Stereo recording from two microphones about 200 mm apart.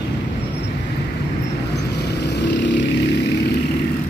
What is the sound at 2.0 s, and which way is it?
Vehicle, 55° left (ahead or behind).